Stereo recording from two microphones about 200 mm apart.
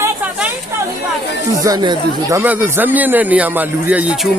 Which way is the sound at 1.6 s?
20° right (ahead or behind).